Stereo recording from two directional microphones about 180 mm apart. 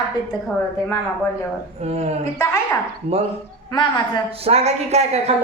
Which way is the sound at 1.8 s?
35° right (ahead or behind).